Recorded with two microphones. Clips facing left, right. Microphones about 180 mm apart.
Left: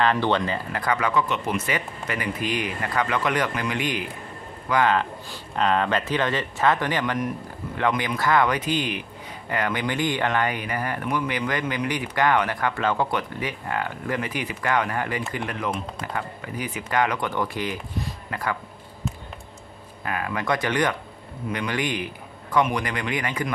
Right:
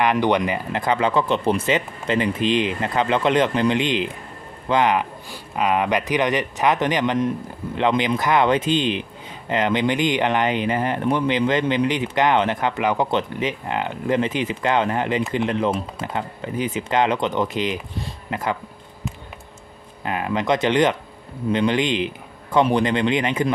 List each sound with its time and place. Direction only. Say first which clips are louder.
0.0 s speech: right 3 dB; 15° right (ahead or behind)
20.1 s speech: right 5 dB; 20° right (ahead or behind)